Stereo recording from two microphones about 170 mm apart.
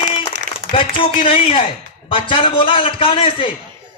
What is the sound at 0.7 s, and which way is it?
A man's voice, 30° left (ahead or behind).